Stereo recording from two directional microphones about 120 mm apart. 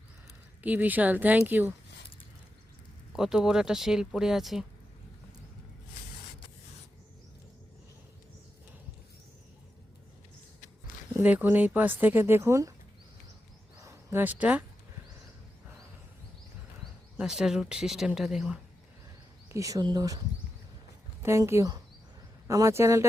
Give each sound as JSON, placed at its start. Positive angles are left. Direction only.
{"t": 0.6, "sound": "speech", "side_deg": -15}
{"t": 3.1, "sound": "speech", "side_deg": -5}
{"t": 11.2, "sound": "speech", "side_deg": -15}
{"t": 13.8, "sound": "speech", "side_deg": -20}
{"t": 17.2, "sound": "speech", "side_deg": -5}
{"t": 19.5, "sound": "speech", "side_deg": -25}
{"t": 21.2, "sound": "speech", "side_deg": -25}